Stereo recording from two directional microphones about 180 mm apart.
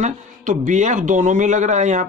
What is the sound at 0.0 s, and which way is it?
Speech, 45° right (ahead or behind).